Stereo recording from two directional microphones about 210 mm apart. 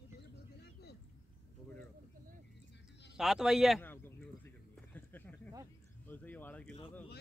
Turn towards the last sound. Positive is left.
turn(degrees=5)  # may be behind; listen again after turning